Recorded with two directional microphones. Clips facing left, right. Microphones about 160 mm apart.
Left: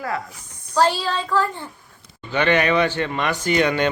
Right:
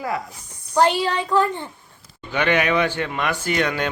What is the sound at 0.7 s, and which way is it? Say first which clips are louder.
A woman's voice: right 1 dB; 20° right (ahead or behind).